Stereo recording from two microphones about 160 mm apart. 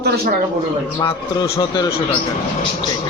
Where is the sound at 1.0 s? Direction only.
25° left (ahead or behind).